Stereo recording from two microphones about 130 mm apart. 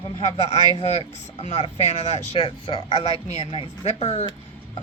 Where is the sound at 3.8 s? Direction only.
55° left (ahead or behind).